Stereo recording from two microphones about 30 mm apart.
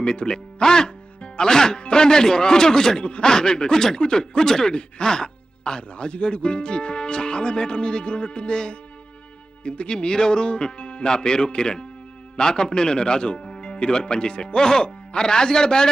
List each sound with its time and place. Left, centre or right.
0.0 s speech: left
3.0 s speech: left
3.2 s speech: left
4.7 s speech: left